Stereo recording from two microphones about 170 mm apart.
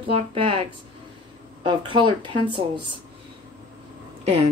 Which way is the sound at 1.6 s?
30° right (ahead or behind).